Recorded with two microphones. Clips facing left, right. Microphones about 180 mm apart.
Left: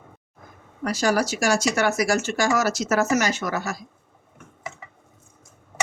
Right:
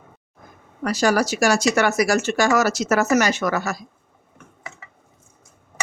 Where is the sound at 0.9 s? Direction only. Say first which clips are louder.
Right 3 dB; 70° right (ahead or behind).